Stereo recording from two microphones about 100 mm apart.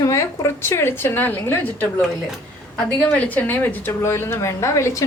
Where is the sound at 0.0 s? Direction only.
30° left (ahead or behind).